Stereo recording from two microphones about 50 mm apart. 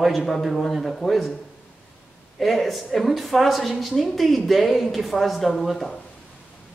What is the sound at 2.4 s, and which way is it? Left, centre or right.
A woman's voice, centre.